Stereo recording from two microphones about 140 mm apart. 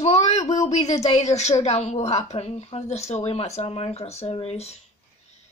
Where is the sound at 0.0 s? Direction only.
50° left (ahead or behind).